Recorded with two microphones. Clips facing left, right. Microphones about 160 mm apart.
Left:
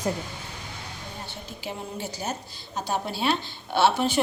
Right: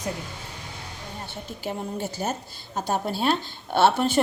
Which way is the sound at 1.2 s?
50° right (ahead or behind).